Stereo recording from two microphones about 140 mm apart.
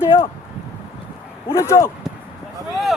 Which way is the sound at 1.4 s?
20° left (ahead or behind).